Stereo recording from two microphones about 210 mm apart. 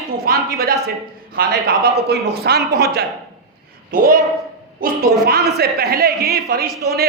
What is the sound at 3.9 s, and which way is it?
A man's voice, 45° right (ahead or behind).